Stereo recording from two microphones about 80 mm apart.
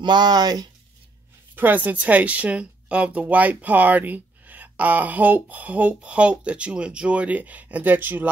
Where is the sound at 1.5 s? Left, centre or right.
Right.